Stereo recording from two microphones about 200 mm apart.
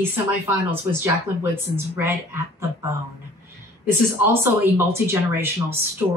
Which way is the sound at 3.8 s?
10° right (ahead or behind).